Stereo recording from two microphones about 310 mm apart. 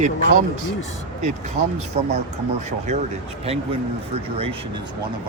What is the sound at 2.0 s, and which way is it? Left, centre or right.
Speech, right.